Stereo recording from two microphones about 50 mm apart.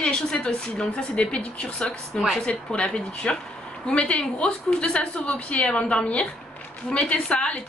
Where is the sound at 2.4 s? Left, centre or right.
Left.